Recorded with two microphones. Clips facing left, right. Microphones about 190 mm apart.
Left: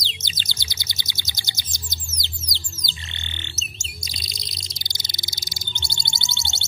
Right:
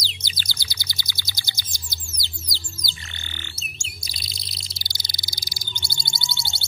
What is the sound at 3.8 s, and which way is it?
Bird, 20° left (ahead or behind).